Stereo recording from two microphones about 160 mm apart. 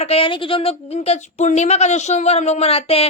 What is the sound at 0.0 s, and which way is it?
Speech, 35° left (ahead or behind).